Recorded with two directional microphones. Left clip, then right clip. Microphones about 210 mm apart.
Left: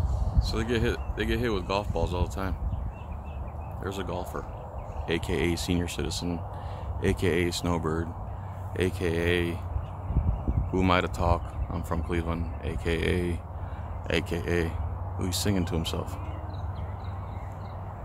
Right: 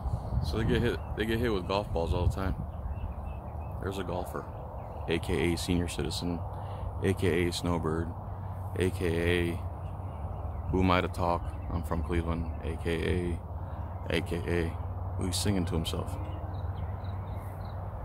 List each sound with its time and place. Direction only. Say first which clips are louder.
0.4 s speech: left 2 dB; 15° left (ahead or behind)
3.8 s speech: left 1 dB; 10° left (ahead or behind)
10.7 s speech: left 2 dB; 10° left (ahead or behind)